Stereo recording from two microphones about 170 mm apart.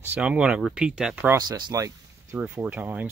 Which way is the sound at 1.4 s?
25° right (ahead or behind).